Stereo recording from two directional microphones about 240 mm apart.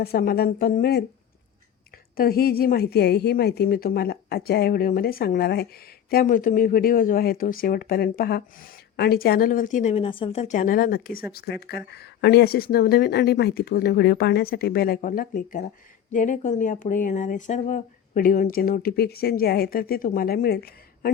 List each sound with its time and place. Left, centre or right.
0.0 s speech: left
2.1 s speech: left